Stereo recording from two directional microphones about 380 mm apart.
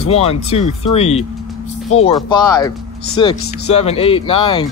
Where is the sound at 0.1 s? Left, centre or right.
Centre.